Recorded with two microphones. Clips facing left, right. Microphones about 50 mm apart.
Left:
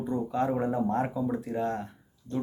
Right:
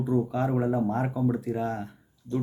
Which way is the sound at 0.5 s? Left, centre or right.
Centre.